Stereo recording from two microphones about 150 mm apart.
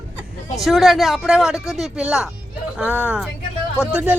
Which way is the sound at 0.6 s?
Centre (ahead or behind).